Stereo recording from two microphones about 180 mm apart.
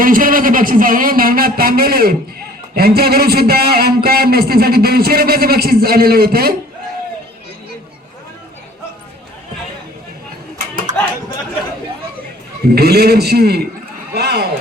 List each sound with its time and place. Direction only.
0.0 s a man's voice: 50° right (ahead or behind)
10.9 s chatter: 45° right (ahead or behind)
12.7 s a man's voice: 60° right (ahead or behind)
14.1 s a sound: 65° right (ahead or behind)